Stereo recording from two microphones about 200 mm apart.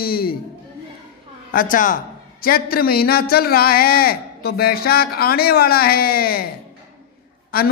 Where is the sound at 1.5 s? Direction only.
40° left (ahead or behind).